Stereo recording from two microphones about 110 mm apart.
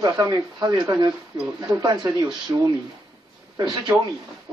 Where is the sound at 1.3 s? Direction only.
5° right (ahead or behind).